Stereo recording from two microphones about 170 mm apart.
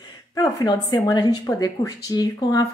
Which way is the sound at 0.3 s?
20° left (ahead or behind).